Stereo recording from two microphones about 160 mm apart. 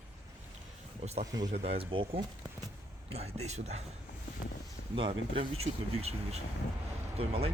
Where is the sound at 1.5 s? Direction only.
40° right (ahead or behind).